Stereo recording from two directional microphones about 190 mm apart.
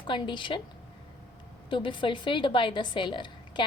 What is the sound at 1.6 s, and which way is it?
A woman's voice, 25° left (ahead or behind).